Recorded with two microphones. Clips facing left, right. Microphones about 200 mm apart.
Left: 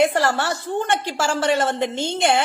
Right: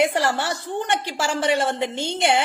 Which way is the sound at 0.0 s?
10° right (ahead or behind).